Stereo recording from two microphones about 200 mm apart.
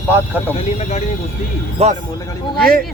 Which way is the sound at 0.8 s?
35° left (ahead or behind).